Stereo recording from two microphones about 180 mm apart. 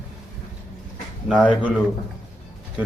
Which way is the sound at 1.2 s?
5° left (ahead or behind).